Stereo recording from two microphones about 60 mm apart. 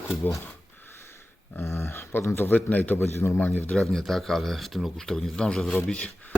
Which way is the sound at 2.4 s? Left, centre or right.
Left.